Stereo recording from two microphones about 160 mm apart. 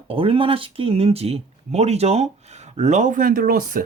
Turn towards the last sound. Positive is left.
turn(degrees=-65)  # may be behind; listen again after turning